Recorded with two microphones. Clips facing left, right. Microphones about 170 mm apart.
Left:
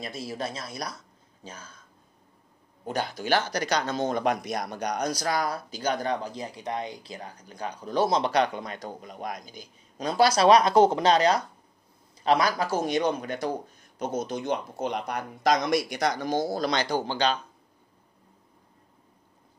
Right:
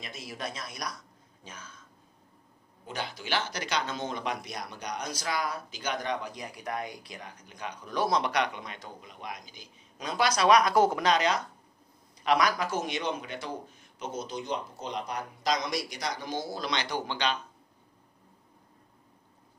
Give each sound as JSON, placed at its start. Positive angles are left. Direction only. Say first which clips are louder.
{"t": 0.0, "sound": "speech", "louder": "left 6 dB", "side_deg": 30}
{"t": 2.8, "sound": "speech", "louder": "left 7 dB", "side_deg": 45}